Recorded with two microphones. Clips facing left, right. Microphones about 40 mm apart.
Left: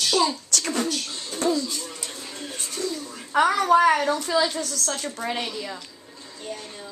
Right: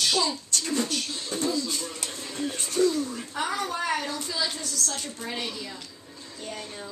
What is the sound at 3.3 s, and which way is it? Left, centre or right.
A woman's voice, left.